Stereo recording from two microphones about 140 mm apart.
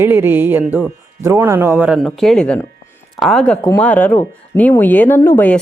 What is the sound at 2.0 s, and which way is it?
Speech, centre (ahead or behind).